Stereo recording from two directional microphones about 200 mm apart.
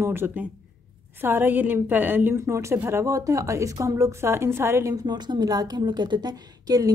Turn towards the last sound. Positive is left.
turn(degrees=-20)  # may be behind; listen again after turning